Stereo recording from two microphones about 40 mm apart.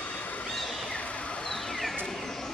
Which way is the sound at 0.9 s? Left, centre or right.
Left.